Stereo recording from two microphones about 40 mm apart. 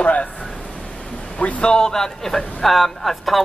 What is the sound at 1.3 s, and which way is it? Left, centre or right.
Speech, left.